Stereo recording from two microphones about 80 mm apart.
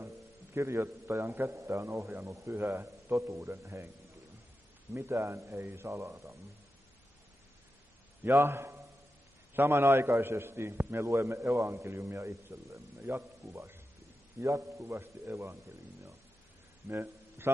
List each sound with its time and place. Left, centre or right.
0.6 s a man's voice: right
4.9 s a man's voice: right
8.2 s a man's voice: right
16.8 s a sound: right